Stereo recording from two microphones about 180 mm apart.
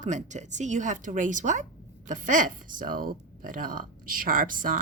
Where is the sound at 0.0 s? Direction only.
40° right (ahead or behind).